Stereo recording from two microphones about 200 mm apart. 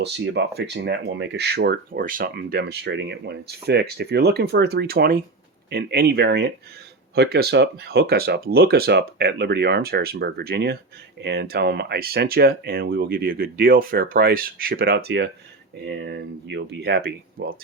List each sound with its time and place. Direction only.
0.0 s speech: 60° right (ahead or behind)